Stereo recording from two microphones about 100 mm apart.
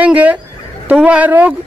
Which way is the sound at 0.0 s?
15° right (ahead or behind).